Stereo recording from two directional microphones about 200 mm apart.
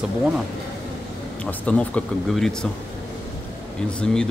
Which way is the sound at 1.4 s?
5° left (ahead or behind).